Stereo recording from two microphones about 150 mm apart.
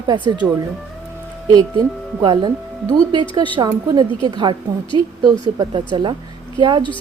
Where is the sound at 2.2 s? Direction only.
30° right (ahead or behind).